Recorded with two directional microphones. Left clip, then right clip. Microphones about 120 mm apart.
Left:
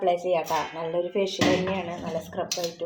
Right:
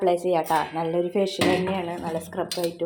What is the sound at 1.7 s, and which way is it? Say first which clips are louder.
Speech: right 2 dB; 35° right (ahead or behind).